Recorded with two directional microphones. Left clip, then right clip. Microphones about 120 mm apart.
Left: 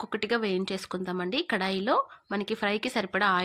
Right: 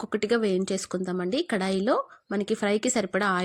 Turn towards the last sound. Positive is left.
turn(degrees=-40)  # may be behind; listen again after turning